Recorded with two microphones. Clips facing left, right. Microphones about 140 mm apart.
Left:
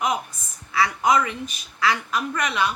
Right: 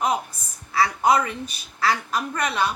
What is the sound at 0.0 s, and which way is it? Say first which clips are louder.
A woman's voice: right 1 dB; 35° right (ahead or behind).